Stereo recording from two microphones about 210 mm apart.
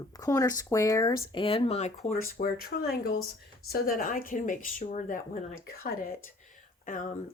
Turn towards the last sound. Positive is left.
turn(degrees=40)  # may be behind; listen again after turning